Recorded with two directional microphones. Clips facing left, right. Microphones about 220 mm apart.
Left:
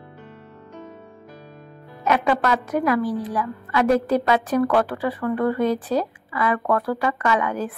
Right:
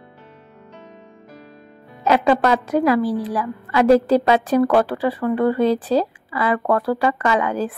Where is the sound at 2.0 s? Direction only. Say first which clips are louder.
Right 4 dB; 30° right (ahead or behind).